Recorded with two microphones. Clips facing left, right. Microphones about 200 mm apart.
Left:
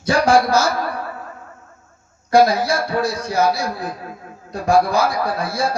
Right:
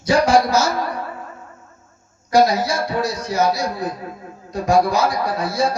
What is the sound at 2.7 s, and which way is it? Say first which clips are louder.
A man's voice: left 1 dB; 55° left (ahead or behind).